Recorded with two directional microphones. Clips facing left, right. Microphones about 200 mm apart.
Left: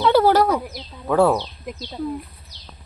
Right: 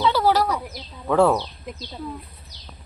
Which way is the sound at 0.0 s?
55° left (ahead or behind).